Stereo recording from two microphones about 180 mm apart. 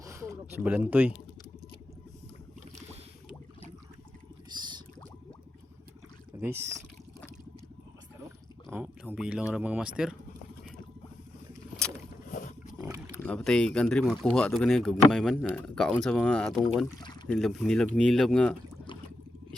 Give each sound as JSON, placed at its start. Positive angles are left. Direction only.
{"t": 0.0, "sound": "speech", "side_deg": -15}
{"t": 4.5, "sound": "a sound", "side_deg": -25}
{"t": 6.4, "sound": "speech", "side_deg": -15}
{"t": 8.7, "sound": "speech", "side_deg": -10}
{"t": 12.3, "sound": "wild animals", "side_deg": 45}
{"t": 13.1, "sound": "speech", "side_deg": 5}